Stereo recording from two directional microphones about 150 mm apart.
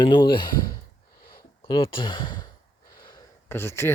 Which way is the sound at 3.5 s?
15° left (ahead or behind).